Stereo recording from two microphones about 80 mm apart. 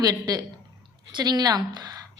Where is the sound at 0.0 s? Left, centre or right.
Right.